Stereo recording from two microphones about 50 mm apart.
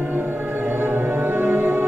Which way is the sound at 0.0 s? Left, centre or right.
Right.